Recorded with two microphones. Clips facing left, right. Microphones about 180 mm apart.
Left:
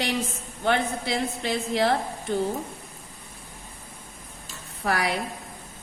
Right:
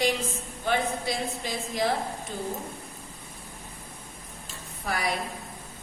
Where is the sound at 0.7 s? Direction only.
70° left (ahead or behind).